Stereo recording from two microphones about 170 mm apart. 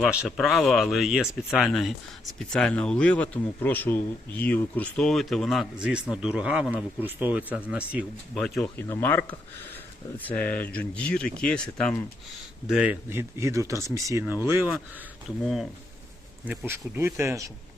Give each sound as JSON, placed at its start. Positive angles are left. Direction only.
{"t": 0.0, "sound": "speech", "side_deg": -5}
{"t": 8.9, "sound": "speech", "side_deg": 15}
{"t": 12.6, "sound": "speech", "side_deg": -5}
{"t": 16.5, "sound": "speech", "side_deg": -15}